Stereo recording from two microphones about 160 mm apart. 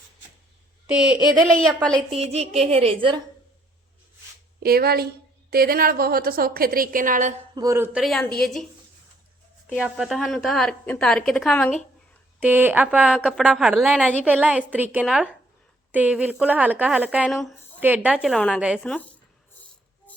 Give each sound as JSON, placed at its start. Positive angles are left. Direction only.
{"t": 0.9, "sound": "a woman's voice", "side_deg": -5}
{"t": 1.5, "sound": "a woman's voice", "side_deg": 5}
{"t": 2.1, "sound": "a woman's voice", "side_deg": -40}
{"t": 4.6, "sound": "a woman's voice", "side_deg": -75}
{"t": 7.5, "sound": "speech", "side_deg": -20}
{"t": 7.9, "sound": "a woman's voice", "side_deg": 0}
{"t": 9.8, "sound": "a woman's voice", "side_deg": -5}
{"t": 12.4, "sound": "a woman's voice", "side_deg": -10}
{"t": 13.1, "sound": "a woman's voice", "side_deg": 5}
{"t": 14.3, "sound": "a woman's voice", "side_deg": -10}
{"t": 17.7, "sound": "a woman's voice", "side_deg": -10}
{"t": 18.6, "sound": "a woman's voice", "side_deg": -5}